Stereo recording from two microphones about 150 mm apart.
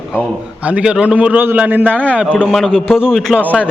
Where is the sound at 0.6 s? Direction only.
5° right (ahead or behind).